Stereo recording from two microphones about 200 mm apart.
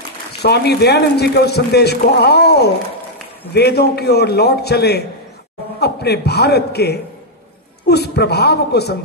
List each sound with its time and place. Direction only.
0.4 s a man's voice: 55° left (ahead or behind)